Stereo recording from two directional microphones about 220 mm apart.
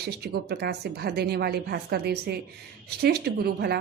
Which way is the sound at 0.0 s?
45° right (ahead or behind).